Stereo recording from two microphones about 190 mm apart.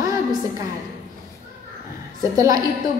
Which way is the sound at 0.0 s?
20° right (ahead or behind).